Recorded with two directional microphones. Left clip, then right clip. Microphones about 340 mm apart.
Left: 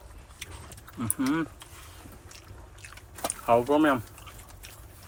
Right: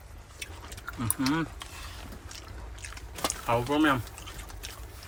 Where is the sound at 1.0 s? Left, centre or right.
Centre.